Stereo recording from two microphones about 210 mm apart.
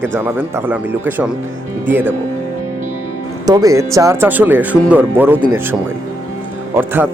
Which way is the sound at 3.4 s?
15° right (ahead or behind).